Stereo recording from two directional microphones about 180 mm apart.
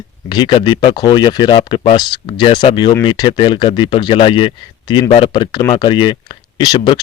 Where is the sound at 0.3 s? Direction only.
25° left (ahead or behind).